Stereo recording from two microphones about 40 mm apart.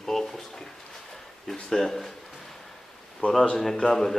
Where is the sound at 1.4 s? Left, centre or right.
Centre.